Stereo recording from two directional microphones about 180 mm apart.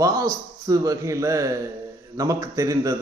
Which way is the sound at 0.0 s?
20° right (ahead or behind).